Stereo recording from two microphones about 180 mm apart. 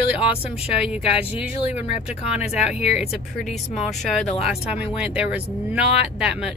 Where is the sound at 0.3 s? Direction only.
30° left (ahead or behind).